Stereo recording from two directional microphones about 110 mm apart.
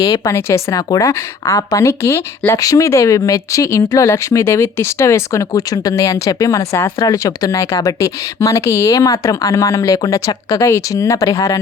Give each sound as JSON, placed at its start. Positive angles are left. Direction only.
{"t": 0.0, "sound": "speech", "side_deg": 35}